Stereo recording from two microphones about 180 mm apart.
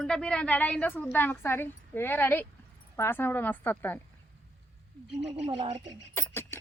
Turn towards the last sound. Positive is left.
turn(degrees=15)  # may be behind; listen again after turning